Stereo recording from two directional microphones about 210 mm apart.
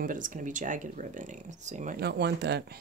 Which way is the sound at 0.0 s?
40° right (ahead or behind).